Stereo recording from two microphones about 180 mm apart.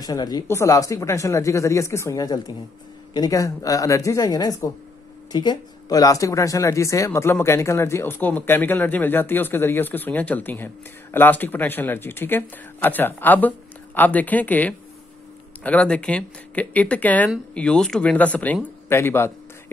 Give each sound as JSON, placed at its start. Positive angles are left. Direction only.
{"t": 0.0, "sound": "speech", "side_deg": 20}